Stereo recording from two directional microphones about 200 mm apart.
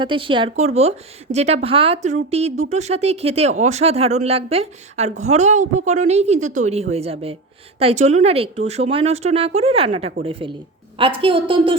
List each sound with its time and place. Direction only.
0.0 s a woman's voice: 25° right (ahead or behind)